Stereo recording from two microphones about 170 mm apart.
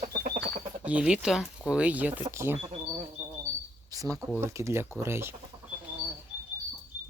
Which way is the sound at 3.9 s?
20° right (ahead or behind).